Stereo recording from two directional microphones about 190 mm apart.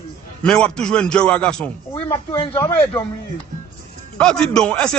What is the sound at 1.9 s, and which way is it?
Speech, 25° left (ahead or behind).